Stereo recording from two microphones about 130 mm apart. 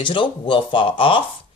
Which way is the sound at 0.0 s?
40° left (ahead or behind).